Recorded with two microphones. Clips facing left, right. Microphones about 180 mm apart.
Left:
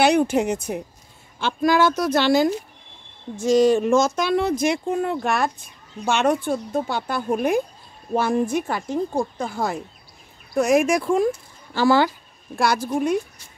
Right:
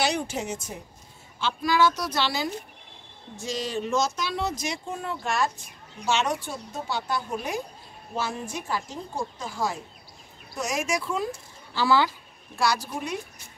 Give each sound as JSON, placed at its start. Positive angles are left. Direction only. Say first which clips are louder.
{"t": 0.0, "sound": "speech", "louder": "left 10 dB", "side_deg": 60}
{"t": 1.4, "sound": "speech", "louder": "left 4 dB", "side_deg": 50}